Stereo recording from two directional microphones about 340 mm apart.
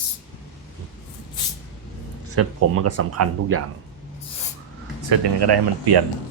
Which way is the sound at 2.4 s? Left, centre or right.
Right.